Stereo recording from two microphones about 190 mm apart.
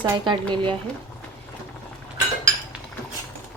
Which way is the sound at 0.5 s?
25° right (ahead or behind).